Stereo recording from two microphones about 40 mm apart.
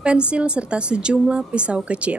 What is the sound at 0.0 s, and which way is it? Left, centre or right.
A woman's voice, right.